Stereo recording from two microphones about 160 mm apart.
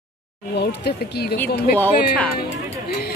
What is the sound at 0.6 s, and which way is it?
Speech, 90° left.